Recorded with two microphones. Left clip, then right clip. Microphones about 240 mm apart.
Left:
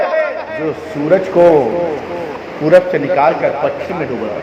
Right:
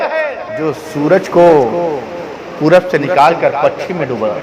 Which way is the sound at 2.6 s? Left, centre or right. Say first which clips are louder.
Even; right.